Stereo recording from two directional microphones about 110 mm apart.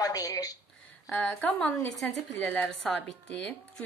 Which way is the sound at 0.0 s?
35° left (ahead or behind).